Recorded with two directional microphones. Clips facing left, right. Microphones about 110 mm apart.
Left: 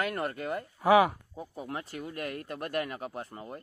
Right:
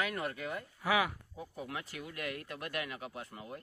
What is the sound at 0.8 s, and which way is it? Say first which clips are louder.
Speech: left 10 dB; 35° left (ahead or behind).